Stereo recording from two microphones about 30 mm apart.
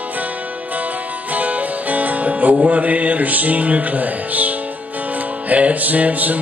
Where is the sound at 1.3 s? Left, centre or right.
Right.